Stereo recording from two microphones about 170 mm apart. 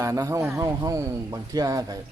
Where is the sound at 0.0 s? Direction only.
20° right (ahead or behind).